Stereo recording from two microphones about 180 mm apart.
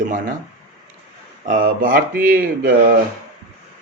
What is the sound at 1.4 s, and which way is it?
Speech, 45° right (ahead or behind).